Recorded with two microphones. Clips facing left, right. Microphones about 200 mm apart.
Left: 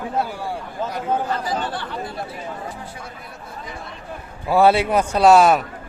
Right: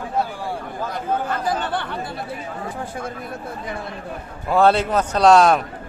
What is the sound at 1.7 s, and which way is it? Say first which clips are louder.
Speech: right 4 dB; 60° right (ahead or behind).